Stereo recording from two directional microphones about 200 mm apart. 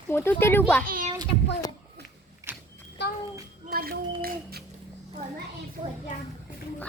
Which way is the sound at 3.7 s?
50° right (ahead or behind).